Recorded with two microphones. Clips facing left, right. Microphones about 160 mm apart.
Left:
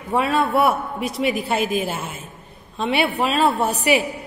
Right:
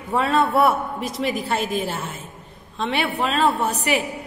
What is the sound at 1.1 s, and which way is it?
Speech, 65° left (ahead or behind).